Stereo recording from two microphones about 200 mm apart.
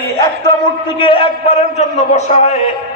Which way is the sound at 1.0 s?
25° left (ahead or behind).